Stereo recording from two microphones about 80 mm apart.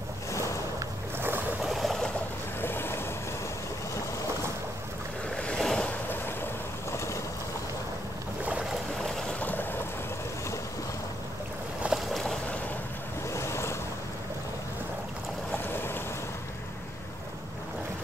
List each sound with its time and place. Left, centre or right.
1.6 s a sound: centre
2.6 s boat: left
5.3 s boat: centre
5.9 s boat: left
9.4 s boat: left
11.9 s boat: centre
13.3 s waves: left
15.5 s boat: left